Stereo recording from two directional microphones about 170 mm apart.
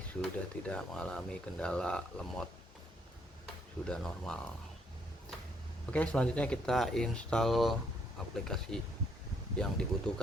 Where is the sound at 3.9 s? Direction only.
5° left (ahead or behind).